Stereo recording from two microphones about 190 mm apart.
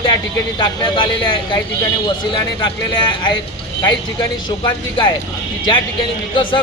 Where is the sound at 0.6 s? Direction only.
25° left (ahead or behind).